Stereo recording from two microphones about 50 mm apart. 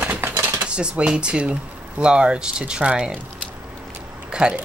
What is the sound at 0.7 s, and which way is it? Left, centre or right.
Speech, right.